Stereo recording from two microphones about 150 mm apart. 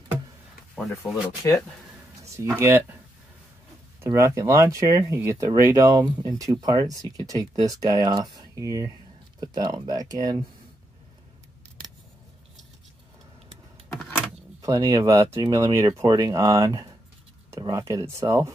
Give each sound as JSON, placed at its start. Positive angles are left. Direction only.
{"t": 1.0, "sound": "speech", "side_deg": -5}
{"t": 2.2, "sound": "speech", "side_deg": -20}
{"t": 4.0, "sound": "speech", "side_deg": -20}
{"t": 14.6, "sound": "speech", "side_deg": -25}